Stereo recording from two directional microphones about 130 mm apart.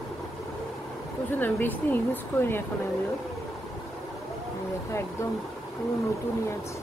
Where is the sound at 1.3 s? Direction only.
15° left (ahead or behind).